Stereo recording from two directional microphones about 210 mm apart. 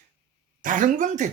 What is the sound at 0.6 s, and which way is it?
Speech, 40° right (ahead or behind).